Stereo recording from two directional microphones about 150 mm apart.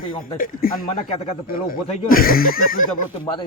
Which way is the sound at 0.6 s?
85° left.